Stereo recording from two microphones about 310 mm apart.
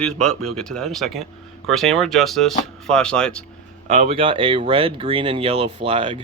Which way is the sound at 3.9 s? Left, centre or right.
Right.